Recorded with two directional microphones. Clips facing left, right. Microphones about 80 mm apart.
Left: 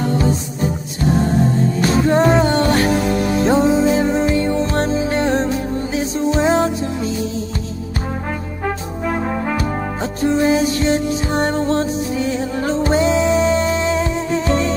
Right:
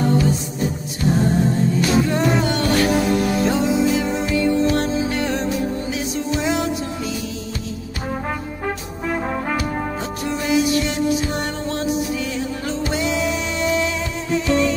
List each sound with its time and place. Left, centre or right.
1.8 s music: left
10.2 s music: left